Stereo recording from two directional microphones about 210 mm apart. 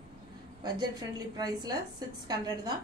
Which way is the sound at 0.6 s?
20° right (ahead or behind).